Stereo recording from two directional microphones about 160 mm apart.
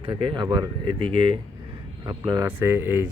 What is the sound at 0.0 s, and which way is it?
Speech, 30° right (ahead or behind).